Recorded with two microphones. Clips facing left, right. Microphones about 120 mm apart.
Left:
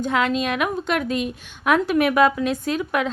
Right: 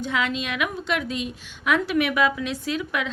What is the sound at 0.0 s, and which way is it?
A woman's voice, 45° left (ahead or behind).